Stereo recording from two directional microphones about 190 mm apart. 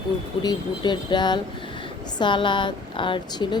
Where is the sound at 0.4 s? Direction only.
25° left (ahead or behind).